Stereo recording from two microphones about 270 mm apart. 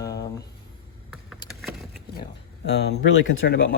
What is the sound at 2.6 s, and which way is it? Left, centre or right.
Speech, left.